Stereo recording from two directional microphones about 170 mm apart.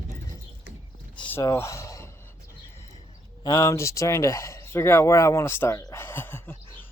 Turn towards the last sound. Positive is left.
turn(degrees=10)  # may be behind; listen again after turning